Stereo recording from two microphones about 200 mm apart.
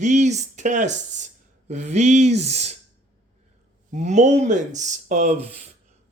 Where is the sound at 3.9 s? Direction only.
35° right (ahead or behind).